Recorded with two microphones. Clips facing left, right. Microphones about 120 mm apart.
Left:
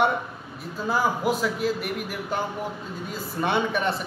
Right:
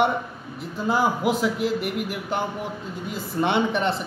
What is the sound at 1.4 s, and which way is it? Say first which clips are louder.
Speech: right 2 dB; 15° right (ahead or behind).